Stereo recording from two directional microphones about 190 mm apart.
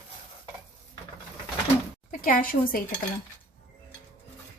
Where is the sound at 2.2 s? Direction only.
45° left (ahead or behind).